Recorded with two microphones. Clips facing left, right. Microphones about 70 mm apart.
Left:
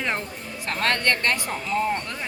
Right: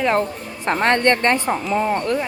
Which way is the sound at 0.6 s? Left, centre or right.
Right.